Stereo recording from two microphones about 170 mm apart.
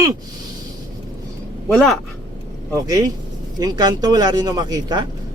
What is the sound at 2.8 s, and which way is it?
Speech, 20° right (ahead or behind).